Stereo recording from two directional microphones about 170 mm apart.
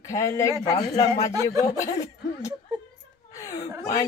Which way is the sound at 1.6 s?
20° left (ahead or behind).